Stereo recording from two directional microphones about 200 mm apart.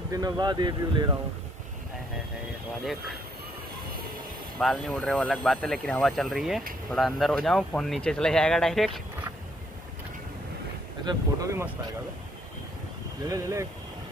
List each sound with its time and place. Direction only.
0.1 s speech: 20° right (ahead or behind)
2.8 s speech: centre (ahead or behind)
4.6 s speech: centre (ahead or behind)
11.1 s speech: 15° right (ahead or behind)
13.3 s speech: 15° right (ahead or behind)